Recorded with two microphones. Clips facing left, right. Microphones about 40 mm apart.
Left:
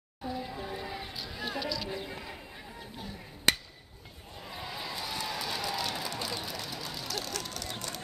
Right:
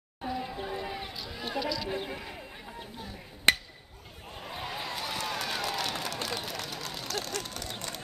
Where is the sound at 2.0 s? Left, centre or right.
Centre.